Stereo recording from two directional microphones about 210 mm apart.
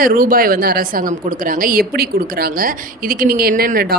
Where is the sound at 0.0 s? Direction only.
40° right (ahead or behind).